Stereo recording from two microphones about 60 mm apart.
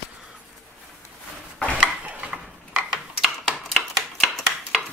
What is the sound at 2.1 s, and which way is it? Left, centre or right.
Mechanisms, right.